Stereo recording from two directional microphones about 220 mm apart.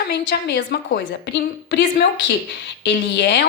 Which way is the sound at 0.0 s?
50° left (ahead or behind).